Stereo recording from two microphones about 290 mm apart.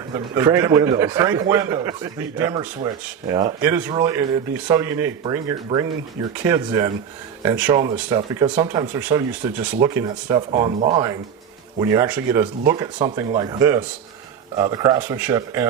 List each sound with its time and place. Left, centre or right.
0.1 s a man's voice: centre